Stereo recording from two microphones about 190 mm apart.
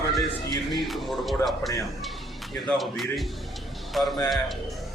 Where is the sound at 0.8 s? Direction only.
Centre (ahead or behind).